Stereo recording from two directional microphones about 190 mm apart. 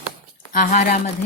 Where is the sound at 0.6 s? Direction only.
45° left (ahead or behind).